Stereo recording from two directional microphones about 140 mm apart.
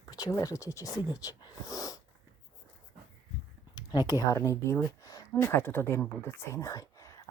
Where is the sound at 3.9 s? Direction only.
25° left (ahead or behind).